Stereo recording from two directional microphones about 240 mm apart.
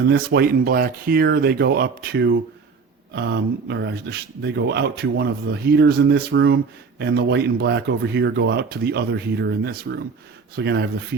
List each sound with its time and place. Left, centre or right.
0.0 s speech: right